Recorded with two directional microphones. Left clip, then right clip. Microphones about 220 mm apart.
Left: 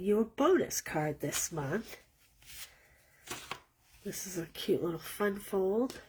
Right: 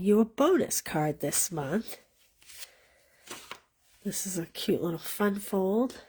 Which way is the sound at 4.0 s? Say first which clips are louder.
Right 4 dB; 45° right (ahead or behind).